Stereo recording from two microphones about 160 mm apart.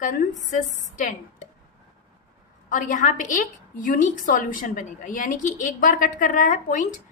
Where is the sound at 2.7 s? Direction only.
55° left (ahead or behind).